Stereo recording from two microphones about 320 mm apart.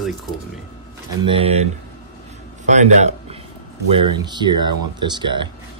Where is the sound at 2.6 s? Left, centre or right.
Right.